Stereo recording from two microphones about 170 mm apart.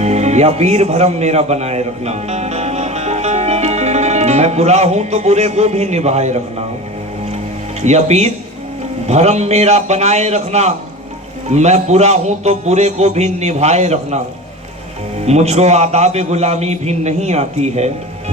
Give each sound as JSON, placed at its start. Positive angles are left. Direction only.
{"t": 0.0, "sound": "a man's voice", "side_deg": -40}
{"t": 7.8, "sound": "a man's voice", "side_deg": -40}
{"t": 15.3, "sound": "a man's voice", "side_deg": -40}